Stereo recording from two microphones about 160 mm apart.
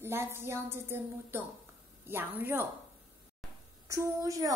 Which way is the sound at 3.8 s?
20° right (ahead or behind).